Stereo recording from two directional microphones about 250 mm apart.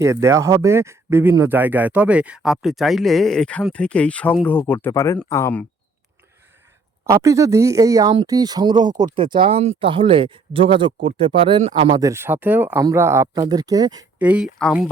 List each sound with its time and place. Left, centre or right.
0.0 s speech: centre
7.0 s speech: centre
14.2 s speech: centre